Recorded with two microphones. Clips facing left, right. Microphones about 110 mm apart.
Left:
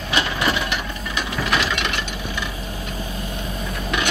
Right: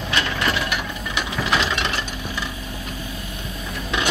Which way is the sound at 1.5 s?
30° right (ahead or behind).